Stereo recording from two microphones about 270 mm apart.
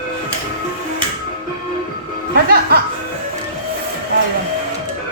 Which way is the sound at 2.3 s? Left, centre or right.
Right.